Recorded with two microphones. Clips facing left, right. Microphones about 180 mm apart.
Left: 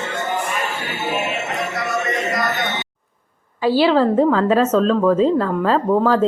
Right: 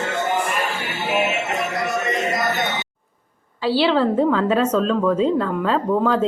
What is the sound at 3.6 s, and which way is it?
Speech, 45° left (ahead or behind).